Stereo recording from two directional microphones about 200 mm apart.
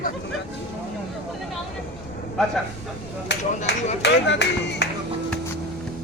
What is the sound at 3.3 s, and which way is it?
Speech, 60° left (ahead or behind).